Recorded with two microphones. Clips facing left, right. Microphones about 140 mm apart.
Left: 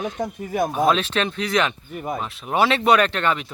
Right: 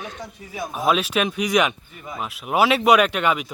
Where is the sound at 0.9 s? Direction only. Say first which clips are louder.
Even; 10° right (ahead or behind).